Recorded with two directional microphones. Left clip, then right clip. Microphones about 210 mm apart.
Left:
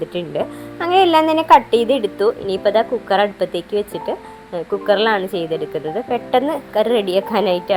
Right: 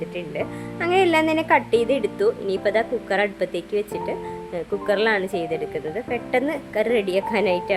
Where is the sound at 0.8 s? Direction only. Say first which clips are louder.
Left 5 dB; centre (ahead or behind).